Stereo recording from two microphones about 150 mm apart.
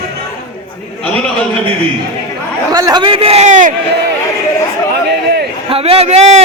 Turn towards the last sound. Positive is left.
turn(degrees=-45)  # may be behind; listen again after turning